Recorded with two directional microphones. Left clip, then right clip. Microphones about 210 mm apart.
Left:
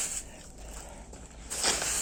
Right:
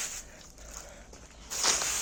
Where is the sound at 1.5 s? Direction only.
20° left (ahead or behind).